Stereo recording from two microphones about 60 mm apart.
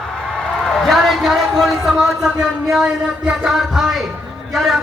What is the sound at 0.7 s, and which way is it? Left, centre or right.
A man's voice, centre.